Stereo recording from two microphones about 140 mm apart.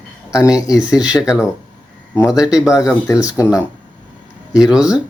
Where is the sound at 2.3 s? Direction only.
5° right (ahead or behind).